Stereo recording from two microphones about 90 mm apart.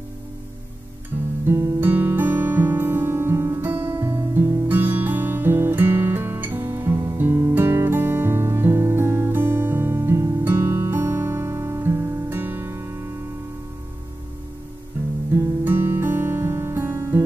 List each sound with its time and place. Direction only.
1.4 s music: 25° right (ahead or behind)
15.6 s music: 25° right (ahead or behind)